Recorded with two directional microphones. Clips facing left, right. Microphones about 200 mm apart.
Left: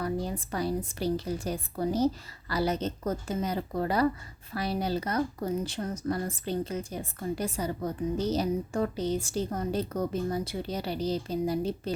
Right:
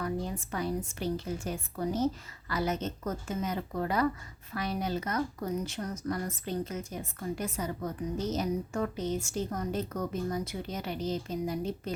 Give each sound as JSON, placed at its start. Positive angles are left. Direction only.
{"t": 0.0, "sound": "speech", "side_deg": 35}